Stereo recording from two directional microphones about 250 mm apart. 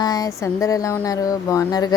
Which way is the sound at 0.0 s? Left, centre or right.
Centre.